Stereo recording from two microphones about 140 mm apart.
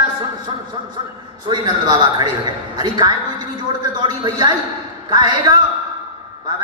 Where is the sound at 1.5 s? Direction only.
30° right (ahead or behind).